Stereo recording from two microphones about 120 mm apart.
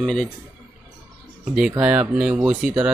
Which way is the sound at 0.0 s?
5° left (ahead or behind).